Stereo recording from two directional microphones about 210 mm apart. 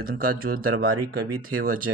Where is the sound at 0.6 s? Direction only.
90° right.